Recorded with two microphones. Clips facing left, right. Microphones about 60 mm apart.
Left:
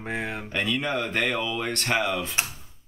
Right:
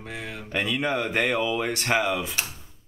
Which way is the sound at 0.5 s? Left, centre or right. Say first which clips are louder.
Right 2 dB; centre.